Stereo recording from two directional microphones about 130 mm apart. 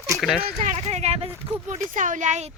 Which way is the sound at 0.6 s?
55° right (ahead or behind).